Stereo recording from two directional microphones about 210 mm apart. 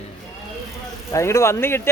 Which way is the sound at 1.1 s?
15° left (ahead or behind).